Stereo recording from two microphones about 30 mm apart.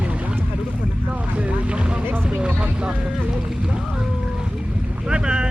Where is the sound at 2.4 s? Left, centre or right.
Right.